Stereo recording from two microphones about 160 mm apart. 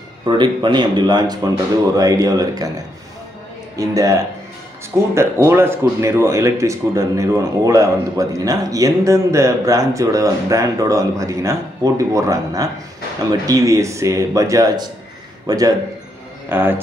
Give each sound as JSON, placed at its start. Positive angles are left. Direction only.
{"t": 0.3, "sound": "speech", "side_deg": -30}
{"t": 3.7, "sound": "a man's voice", "side_deg": -20}